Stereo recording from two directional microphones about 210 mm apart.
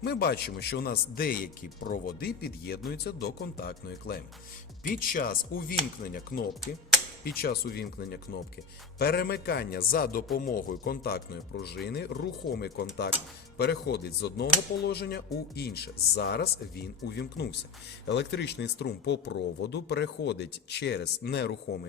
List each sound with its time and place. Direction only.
0.0 s speech: 50° left (ahead or behind)